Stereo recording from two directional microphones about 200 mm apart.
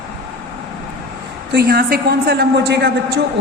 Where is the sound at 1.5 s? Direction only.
50° right (ahead or behind).